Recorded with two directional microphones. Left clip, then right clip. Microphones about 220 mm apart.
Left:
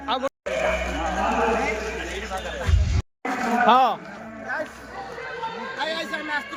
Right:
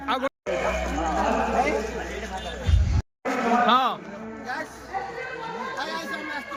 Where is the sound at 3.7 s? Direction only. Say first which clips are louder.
Left 6 dB; 10° right (ahead or behind).